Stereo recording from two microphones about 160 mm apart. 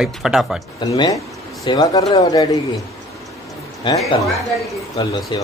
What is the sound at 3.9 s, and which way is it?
Speech, 30° left (ahead or behind).